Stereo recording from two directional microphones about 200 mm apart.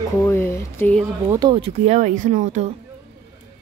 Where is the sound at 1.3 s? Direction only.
20° right (ahead or behind).